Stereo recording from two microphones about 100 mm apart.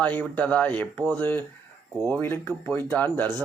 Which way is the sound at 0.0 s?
15° left (ahead or behind).